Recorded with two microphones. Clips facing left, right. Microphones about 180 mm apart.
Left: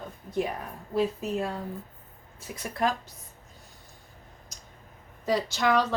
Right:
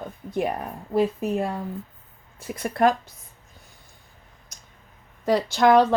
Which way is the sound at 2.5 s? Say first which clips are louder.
Right 8 dB; 65° right (ahead or behind).